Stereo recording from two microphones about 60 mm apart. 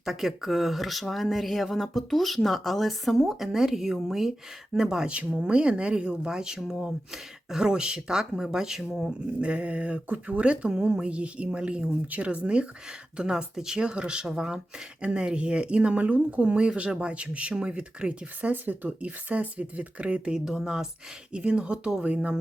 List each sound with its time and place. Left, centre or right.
0.0 s speech: centre
5.1 s speech: right; by 9.1 s centre
9.4 s speech: right
18.5 s speech: right; by 20.8 s centre
21.3 s speech: centre